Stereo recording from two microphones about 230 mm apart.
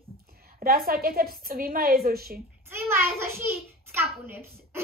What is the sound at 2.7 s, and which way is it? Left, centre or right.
A child's voice, centre.